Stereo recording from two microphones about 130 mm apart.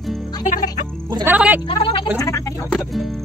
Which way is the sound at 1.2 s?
10° right (ahead or behind).